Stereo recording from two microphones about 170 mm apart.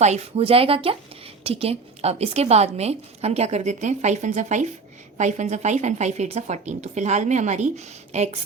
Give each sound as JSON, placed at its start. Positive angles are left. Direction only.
{"t": 0.0, "sound": "a woman's voice", "side_deg": -40}